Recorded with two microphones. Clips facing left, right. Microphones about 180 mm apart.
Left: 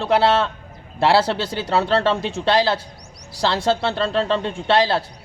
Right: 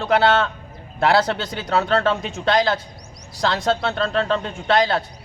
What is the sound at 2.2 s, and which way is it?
Speech, 30° left (ahead or behind).